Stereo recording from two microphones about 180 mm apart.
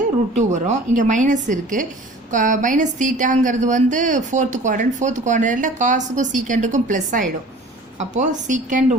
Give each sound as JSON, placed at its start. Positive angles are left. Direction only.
{"t": 0.6, "sound": "a woman's voice", "side_deg": -40}